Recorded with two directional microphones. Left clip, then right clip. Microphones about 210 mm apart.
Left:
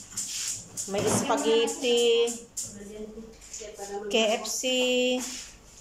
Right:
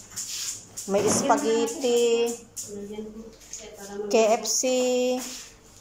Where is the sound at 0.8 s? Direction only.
5° right (ahead or behind).